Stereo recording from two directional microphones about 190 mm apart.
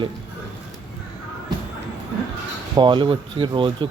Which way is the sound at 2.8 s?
25° right (ahead or behind).